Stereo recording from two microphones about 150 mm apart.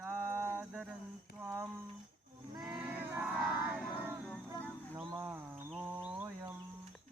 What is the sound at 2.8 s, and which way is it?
Battle cry, 10° right (ahead or behind).